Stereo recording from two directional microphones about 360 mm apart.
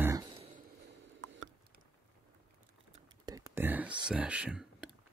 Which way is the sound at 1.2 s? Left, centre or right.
Right.